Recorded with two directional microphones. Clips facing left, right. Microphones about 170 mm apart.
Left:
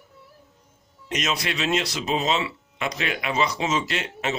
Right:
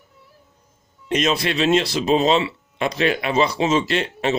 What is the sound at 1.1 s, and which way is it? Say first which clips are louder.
Speech: right 7 dB; 30° right (ahead or behind).